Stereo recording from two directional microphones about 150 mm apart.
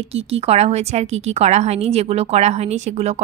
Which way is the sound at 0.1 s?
45° right (ahead or behind).